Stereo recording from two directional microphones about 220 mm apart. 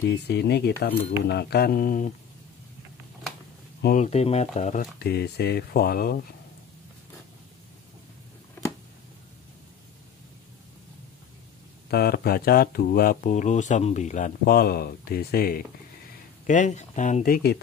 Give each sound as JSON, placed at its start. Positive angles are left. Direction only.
{"t": 0.0, "sound": "speech", "side_deg": 50}
{"t": 3.8, "sound": "speech", "side_deg": 35}
{"t": 4.9, "sound": "speech", "side_deg": 45}
{"t": 11.9, "sound": "speech", "side_deg": 45}